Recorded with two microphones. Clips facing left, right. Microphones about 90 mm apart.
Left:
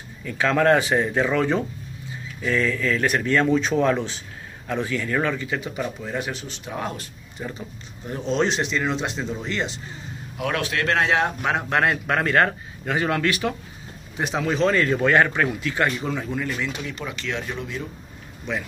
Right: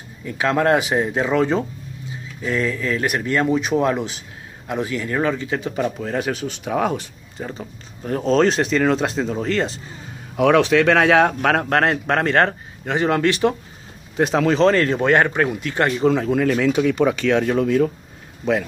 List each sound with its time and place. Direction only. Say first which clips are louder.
0.2 s speech: right 1 dB; 25° right (ahead or behind)
5.9 s speech: right 5 dB; 60° right (ahead or behind)
6.6 s speech: right 9 dB; 90° right
7.3 s speech: right 3 dB; 35° right (ahead or behind)
8.0 s speech: right 6 dB; 50° right (ahead or behind)
11.0 s speech: right 6 dB; 75° right (ahead or behind)
11.7 s a man's voice: right 3 dB; 40° right (ahead or behind)
15.0 s speech: right 1 dB; 25° right (ahead or behind)
15.6 s speech: right 5 dB; 45° right (ahead or behind)
16.3 s speech: right 10 dB; 75° right (ahead or behind); by 18.7 s 90° right